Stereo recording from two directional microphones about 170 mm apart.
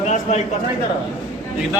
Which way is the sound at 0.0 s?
45° left (ahead or behind).